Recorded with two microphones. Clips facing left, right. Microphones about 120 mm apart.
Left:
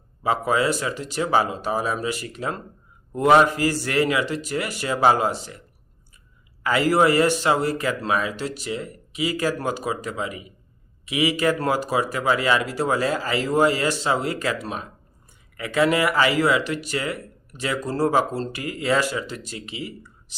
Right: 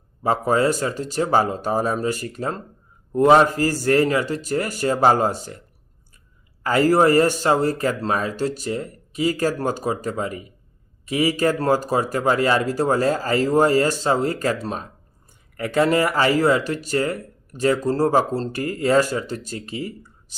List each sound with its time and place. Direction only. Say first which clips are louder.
0.2 s speech: right 3 dB; 40° right (ahead or behind)
6.6 s speech: right 2 dB; 45° right (ahead or behind)